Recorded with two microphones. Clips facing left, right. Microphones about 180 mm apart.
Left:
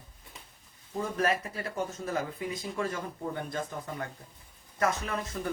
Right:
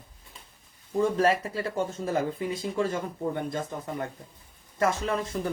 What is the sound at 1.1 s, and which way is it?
Speech, 30° right (ahead or behind).